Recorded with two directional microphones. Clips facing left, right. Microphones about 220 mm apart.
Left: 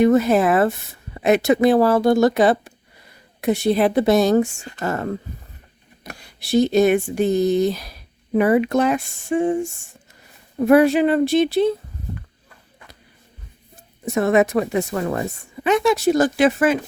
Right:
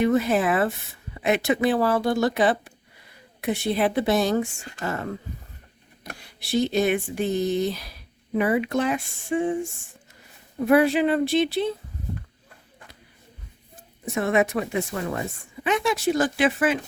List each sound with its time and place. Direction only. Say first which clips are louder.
0.0 s speech: left 6 dB; 45° left (ahead or behind)
10.7 s speech: left 5 dB; 45° left (ahead or behind)
14.0 s speech: left 5 dB; 40° left (ahead or behind)